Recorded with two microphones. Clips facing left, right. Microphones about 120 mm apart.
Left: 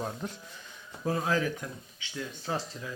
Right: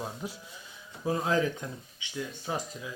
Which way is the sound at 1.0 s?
20° right (ahead or behind).